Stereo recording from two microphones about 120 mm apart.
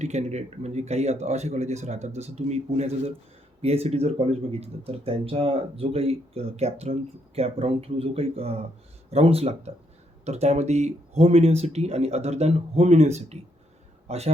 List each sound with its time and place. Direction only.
0.0 s speech: 70° right (ahead or behind)